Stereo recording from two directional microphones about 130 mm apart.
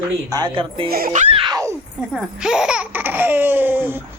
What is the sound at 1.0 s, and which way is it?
Speech, 65° right (ahead or behind).